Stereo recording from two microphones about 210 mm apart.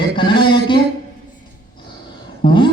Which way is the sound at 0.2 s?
25° left (ahead or behind).